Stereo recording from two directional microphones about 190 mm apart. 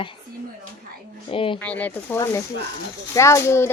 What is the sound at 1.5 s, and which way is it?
Speech, 10° left (ahead or behind).